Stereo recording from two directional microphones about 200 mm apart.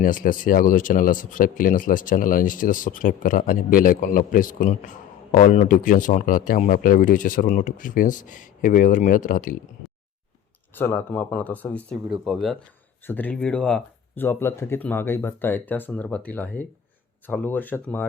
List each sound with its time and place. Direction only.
0.0 s a man's voice: 40° left (ahead or behind)
10.8 s speech: 10° left (ahead or behind)